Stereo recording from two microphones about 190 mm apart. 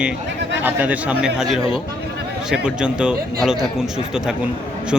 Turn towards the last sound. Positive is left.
turn(degrees=-5)  # may be behind; listen again after turning